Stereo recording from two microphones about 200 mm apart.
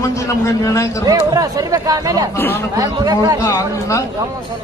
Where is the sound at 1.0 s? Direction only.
15° right (ahead or behind).